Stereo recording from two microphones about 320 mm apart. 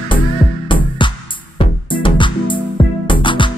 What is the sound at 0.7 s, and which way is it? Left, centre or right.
Music, centre.